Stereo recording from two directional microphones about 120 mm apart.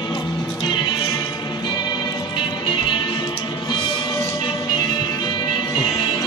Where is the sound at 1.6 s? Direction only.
35° left (ahead or behind).